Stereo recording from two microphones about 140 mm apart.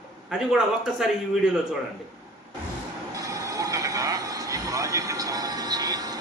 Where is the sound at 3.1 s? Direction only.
25° right (ahead or behind).